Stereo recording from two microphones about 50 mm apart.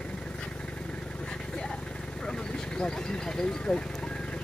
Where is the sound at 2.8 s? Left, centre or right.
Centre.